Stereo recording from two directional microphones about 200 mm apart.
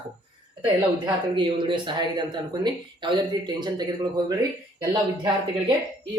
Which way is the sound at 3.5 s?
20° right (ahead or behind).